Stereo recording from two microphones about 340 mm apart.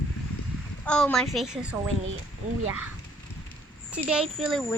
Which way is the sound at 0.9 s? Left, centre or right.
Centre.